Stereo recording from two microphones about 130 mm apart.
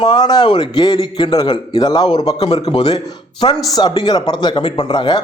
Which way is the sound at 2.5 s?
50° left (ahead or behind).